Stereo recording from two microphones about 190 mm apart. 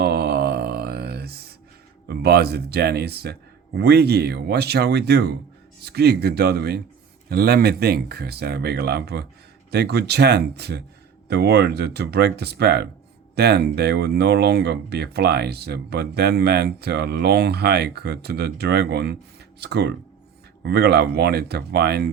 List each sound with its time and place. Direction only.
0.0 s mantra: 60° right (ahead or behind)
2.0 s speech: 60° right (ahead or behind)